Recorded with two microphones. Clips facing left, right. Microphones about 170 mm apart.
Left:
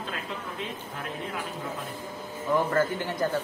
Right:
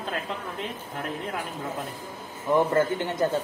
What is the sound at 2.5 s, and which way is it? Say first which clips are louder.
Speech: right 3 dB; 25° right (ahead or behind).